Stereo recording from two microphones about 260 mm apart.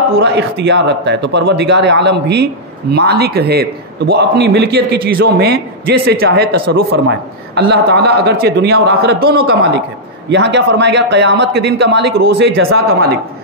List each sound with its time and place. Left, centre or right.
0.1 s speech: right